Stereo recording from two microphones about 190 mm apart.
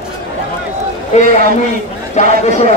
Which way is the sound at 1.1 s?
40° left (ahead or behind).